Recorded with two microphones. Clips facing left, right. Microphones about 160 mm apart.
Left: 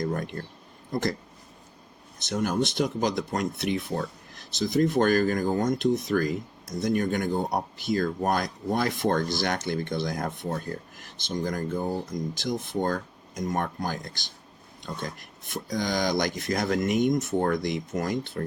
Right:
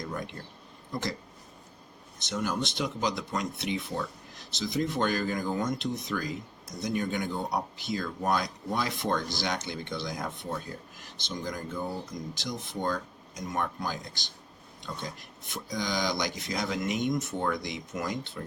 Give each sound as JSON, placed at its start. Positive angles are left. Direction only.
{"t": 0.0, "sound": "speech", "side_deg": 50}
{"t": 2.1, "sound": "speech", "side_deg": 50}